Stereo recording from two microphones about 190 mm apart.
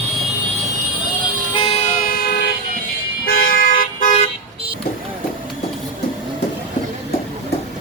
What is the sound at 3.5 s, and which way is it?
Vehicle, 45° left (ahead or behind).